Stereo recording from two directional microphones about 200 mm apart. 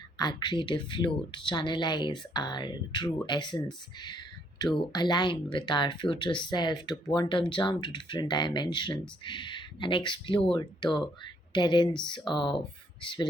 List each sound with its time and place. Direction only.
0.2 s speech: 20° left (ahead or behind)